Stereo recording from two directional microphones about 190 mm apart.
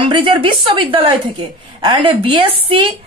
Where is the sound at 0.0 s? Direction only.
25° right (ahead or behind).